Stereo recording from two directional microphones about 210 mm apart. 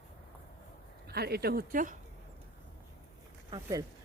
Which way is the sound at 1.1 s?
50° right (ahead or behind).